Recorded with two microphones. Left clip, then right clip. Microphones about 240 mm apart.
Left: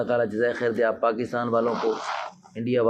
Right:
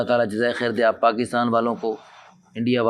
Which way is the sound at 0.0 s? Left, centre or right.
Right.